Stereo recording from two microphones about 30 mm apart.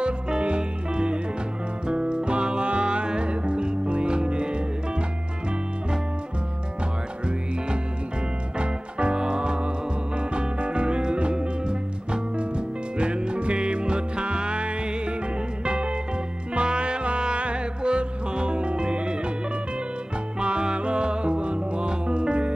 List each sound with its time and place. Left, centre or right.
0.0 s music: right
8.5 s music: right
20.3 s music: right